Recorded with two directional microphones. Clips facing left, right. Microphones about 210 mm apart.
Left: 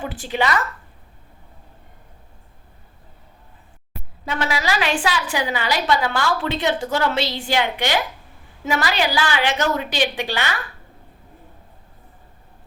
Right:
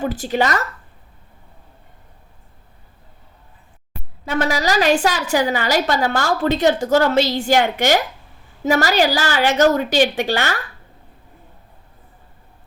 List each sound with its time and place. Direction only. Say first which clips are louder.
0.0 s a woman's voice: right 4 dB; 40° right (ahead or behind)
4.4 s a woman's voice: right 5 dB; 40° right (ahead or behind)